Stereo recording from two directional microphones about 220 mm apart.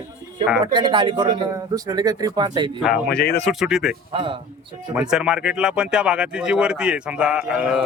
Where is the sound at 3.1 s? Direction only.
50° left (ahead or behind).